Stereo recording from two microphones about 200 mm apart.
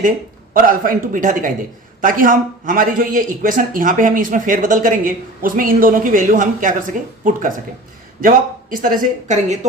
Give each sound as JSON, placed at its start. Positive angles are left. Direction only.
{"t": 0.5, "sound": "speech", "side_deg": -45}